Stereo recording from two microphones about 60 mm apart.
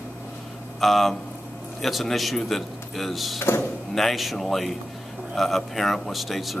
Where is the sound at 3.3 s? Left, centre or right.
Left.